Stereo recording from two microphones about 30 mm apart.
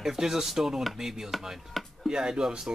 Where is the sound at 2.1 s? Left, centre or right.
Right.